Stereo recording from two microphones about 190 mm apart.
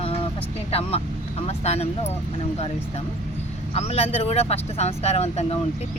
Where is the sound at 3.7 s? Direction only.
35° left (ahead or behind).